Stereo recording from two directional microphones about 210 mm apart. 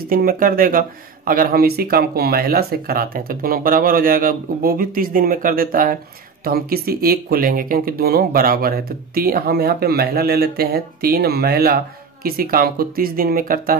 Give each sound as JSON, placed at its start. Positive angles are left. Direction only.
{"t": 0.1, "sound": "speech", "side_deg": -45}